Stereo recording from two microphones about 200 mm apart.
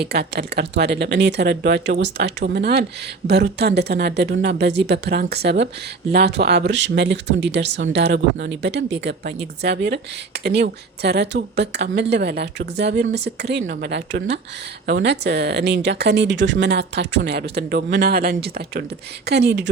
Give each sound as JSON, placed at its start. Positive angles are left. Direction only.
{"t": 0.0, "sound": "speech", "side_deg": -55}